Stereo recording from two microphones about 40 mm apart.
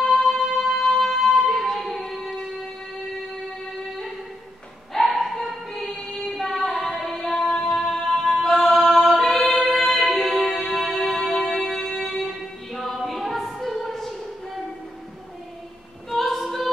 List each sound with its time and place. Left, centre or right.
0.0 s music: centre
5.1 s a sound: centre
5.8 s choir: centre
6.8 s carnatic music: centre
7.3 s music: centre
7.7 s music: centre
8.4 s choir: centre
9.6 s music: centre
11.1 s music: centre
16.1 s a capella: centre